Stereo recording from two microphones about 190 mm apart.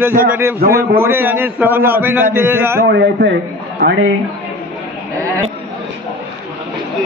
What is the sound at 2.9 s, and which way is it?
Speech, 65° right (ahead or behind).